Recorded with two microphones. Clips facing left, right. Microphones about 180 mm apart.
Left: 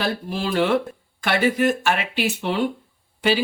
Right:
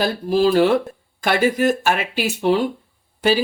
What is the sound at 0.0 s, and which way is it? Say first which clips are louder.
Speech: right 8 dB; 40° right (ahead or behind).